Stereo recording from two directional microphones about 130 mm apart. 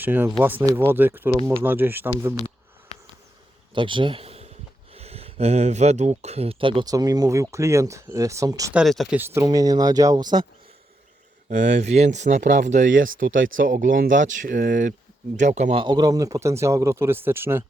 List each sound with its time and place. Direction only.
0.0 s speech: 15° right (ahead or behind)
3.8 s speech: 40° right (ahead or behind)
6.8 s speech: 30° right (ahead or behind)
8.7 s speech: centre (ahead or behind)
9.1 s speech: 20° right (ahead or behind)
11.4 s speech: 65° right (ahead or behind); by 14.9 s 90° right
15.4 s speech: 70° right (ahead or behind)
15.7 s speech: 35° right (ahead or behind); by 17.6 s 20° right (ahead or behind)